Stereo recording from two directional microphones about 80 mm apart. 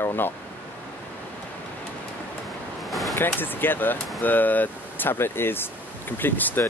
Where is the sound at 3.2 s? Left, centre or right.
Left.